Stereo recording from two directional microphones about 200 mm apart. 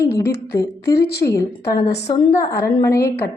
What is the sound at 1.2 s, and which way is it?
A woman's voice, 20° left (ahead or behind).